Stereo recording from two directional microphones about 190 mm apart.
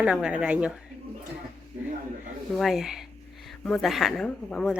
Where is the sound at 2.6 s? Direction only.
Centre (ahead or behind).